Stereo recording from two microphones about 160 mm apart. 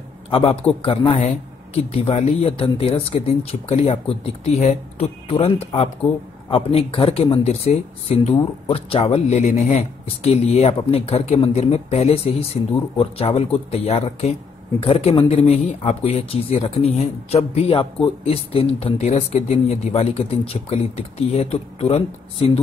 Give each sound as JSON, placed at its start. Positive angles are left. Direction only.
{"t": 0.3, "sound": "speech", "side_deg": 35}